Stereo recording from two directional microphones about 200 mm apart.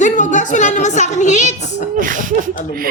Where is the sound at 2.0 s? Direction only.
40° right (ahead or behind).